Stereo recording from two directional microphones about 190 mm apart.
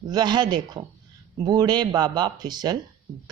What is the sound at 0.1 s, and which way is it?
Speech, 20° right (ahead or behind).